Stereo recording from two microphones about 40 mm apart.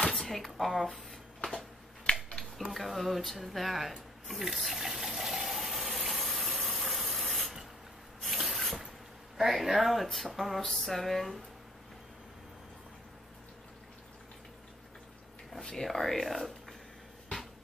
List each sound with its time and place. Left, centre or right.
0.0 s a sound: centre
0.7 s speech: centre
1.4 s a sound: centre
2.1 s scissors: left
2.7 s speech: centre
3.3 s water: centre
6.6 s spray: centre
8.2 s a sound: centre
9.4 s speech: centre
15.6 s speech: centre